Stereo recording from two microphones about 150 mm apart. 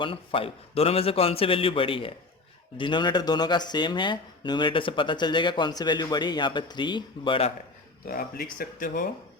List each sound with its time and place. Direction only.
0.0 s speech: 35° left (ahead or behind)
8.0 s speech: 75° left (ahead or behind)